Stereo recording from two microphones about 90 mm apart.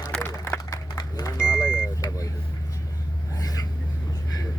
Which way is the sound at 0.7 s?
40° left (ahead or behind).